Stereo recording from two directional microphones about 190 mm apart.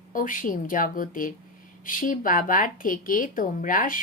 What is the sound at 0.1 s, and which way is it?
A woman's voice, 45° left (ahead or behind).